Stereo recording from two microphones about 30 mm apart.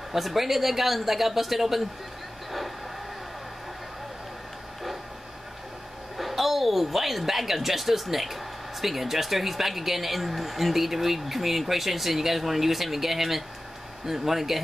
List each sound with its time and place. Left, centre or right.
0.1 s speech: centre
6.1 s a woman's voice: centre